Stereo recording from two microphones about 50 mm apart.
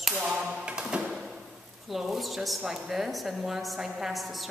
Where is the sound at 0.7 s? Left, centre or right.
Centre.